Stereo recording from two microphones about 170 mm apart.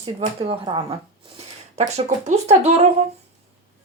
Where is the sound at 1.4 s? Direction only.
40° right (ahead or behind).